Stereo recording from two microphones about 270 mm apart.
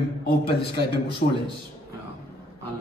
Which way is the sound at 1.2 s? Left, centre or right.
Left.